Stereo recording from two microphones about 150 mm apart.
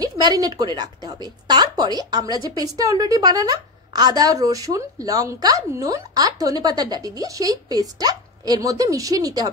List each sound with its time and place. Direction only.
0.0 s a woman's voice: 25° right (ahead or behind)